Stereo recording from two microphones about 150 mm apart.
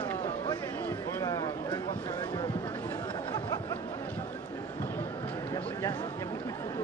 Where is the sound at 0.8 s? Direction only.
20° left (ahead or behind).